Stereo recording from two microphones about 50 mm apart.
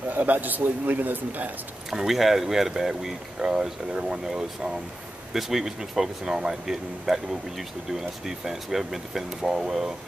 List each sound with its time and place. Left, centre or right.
0.1 s a man's voice: right
1.9 s speech: centre